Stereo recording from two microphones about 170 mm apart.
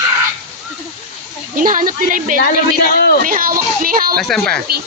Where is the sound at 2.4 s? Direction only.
65° left (ahead or behind).